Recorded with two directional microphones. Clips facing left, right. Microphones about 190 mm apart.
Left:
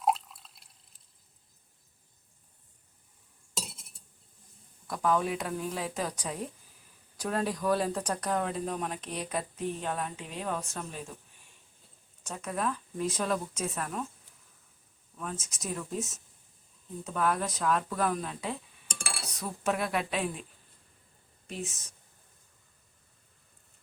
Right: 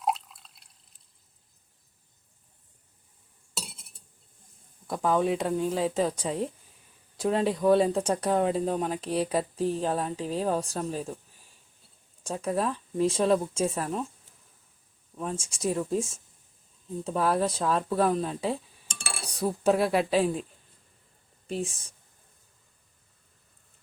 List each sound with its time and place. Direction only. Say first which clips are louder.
0.0 s drip: left 1 dB; centre (ahead or behind)
4.9 s speech: right 4 dB; 25° right (ahead or behind)
12.2 s speech: right 5 dB; 30° right (ahead or behind)
15.2 s speech: right 8 dB; 30° right (ahead or behind)
21.4 s speech: right 7 dB; 30° right (ahead or behind)